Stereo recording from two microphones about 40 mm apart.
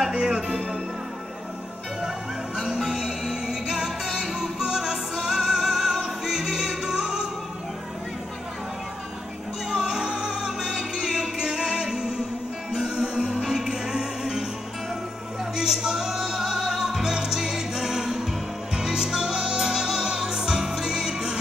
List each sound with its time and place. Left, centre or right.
0.1 s music: centre
2.0 s music: centre
9.7 s music: centre
15.5 s music: centre